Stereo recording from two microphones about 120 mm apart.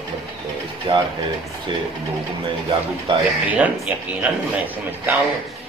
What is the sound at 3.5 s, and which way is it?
Speech, 10° right (ahead or behind).